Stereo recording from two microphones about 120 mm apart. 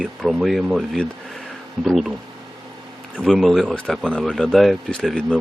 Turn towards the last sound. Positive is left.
turn(degrees=5)  # may be behind; listen again after turning